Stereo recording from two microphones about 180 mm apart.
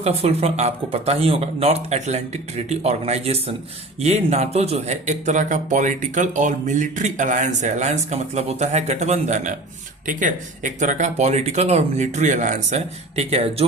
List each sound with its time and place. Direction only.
0.0 s speech: 35° right (ahead or behind)